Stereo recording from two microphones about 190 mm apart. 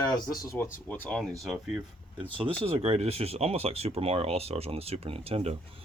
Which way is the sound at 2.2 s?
25° right (ahead or behind).